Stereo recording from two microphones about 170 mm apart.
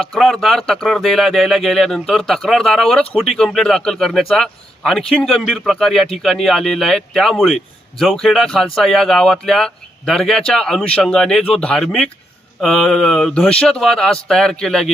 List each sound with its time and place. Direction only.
0.0 s a man's voice: 5° left (ahead or behind)